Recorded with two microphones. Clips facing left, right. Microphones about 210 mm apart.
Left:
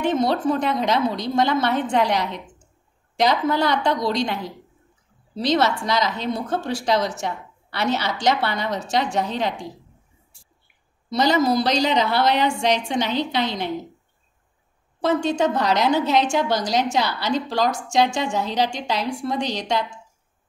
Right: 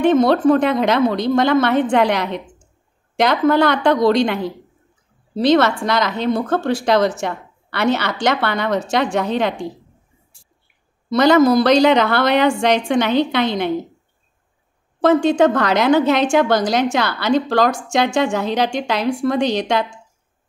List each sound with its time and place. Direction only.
0.0 s a woman's voice: 55° right (ahead or behind)
11.1 s a woman's voice: 55° right (ahead or behind)
15.0 s a woman's voice: 55° right (ahead or behind)